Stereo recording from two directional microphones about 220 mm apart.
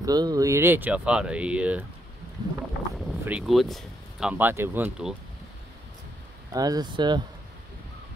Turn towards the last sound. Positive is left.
turn(degrees=-20)  # may be behind; listen again after turning